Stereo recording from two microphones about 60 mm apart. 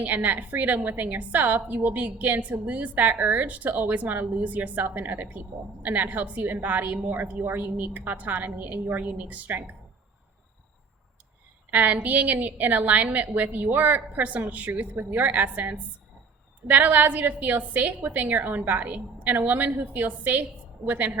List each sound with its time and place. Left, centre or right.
0.0 s a woman's voice: right
11.7 s a woman's voice: right